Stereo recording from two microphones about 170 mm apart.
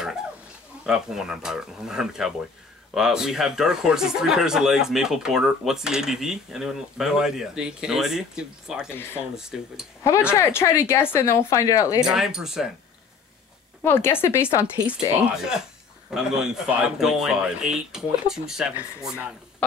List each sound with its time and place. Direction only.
0.8 s speech: 5° right (ahead or behind)
8.9 s speech: 15° left (ahead or behind)
9.3 s speech: 5° right (ahead or behind)
10.3 s speech: 15° left (ahead or behind)
12.1 s speech: 5° right (ahead or behind)
13.8 s speech: 15° left (ahead or behind)
15.3 s speech: 5° right (ahead or behind)